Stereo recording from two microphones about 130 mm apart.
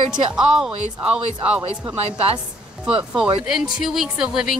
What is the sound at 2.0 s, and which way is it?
Speech, 50° right (ahead or behind).